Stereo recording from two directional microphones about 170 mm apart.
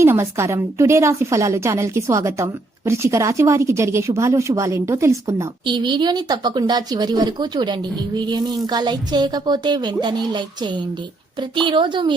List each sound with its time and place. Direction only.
0.0 s a woman's voice: 15° right (ahead or behind)
5.6 s speech: 25° right (ahead or behind)